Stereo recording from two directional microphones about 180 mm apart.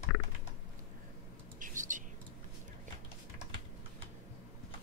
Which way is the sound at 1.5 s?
45° right (ahead or behind).